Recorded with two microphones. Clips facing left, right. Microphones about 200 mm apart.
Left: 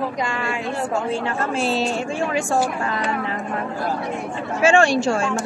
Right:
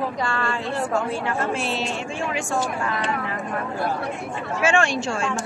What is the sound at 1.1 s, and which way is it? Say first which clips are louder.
Speech: left 1 dB; 35° left (ahead or behind).